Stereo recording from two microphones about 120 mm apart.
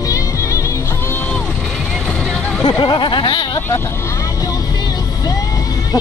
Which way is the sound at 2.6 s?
40° left (ahead or behind).